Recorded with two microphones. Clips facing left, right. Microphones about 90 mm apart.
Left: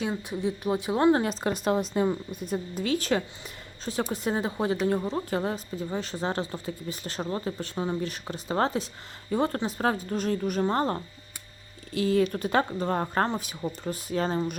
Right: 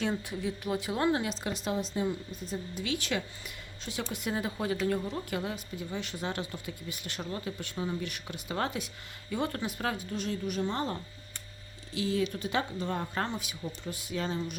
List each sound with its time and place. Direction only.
0.0 s a woman's voice: 15° left (ahead or behind)
1.1 s a woman's voice: 45° left (ahead or behind)